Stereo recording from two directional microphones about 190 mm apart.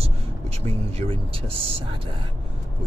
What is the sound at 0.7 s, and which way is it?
Speech, 30° right (ahead or behind).